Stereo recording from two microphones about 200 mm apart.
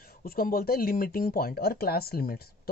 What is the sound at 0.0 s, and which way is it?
Speech, 50° left (ahead or behind).